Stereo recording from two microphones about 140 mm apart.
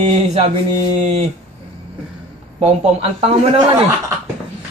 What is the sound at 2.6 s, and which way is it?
A man's voice, 45° right (ahead or behind).